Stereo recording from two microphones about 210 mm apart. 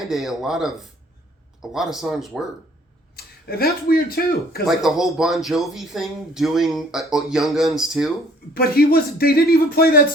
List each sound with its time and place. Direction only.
0.0 s speech: centre (ahead or behind)
3.2 s speech: 45° left (ahead or behind)
4.6 s speech: centre (ahead or behind)
8.5 s speech: 45° left (ahead or behind)